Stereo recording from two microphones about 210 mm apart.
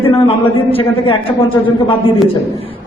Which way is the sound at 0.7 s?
25° left (ahead or behind).